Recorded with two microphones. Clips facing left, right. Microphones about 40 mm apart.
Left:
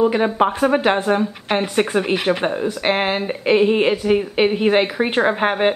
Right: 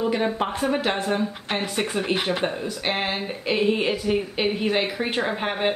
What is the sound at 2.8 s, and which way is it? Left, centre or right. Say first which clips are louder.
A woman's voice: left 6 dB; left.